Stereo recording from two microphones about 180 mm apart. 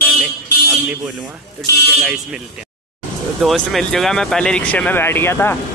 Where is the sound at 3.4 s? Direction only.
5° left (ahead or behind).